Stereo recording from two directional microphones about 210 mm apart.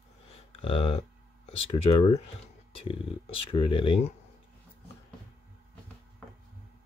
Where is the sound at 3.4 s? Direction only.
25° left (ahead or behind).